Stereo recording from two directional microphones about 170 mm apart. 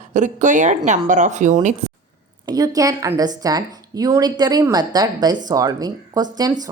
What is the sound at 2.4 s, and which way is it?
A woman's voice, 20° right (ahead or behind).